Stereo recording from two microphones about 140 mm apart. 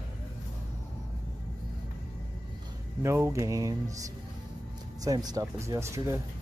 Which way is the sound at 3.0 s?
20° right (ahead or behind).